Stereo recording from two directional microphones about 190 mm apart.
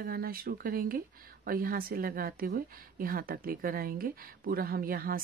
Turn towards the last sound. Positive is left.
turn(degrees=-50)  # may be behind; listen again after turning